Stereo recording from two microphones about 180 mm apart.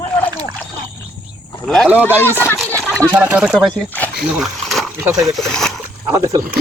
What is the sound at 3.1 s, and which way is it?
Speech, 10° right (ahead or behind).